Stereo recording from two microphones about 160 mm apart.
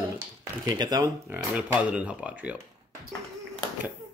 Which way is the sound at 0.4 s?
25° right (ahead or behind).